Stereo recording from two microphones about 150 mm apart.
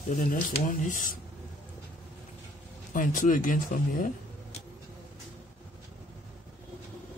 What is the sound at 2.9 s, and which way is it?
Speech, 60° left (ahead or behind).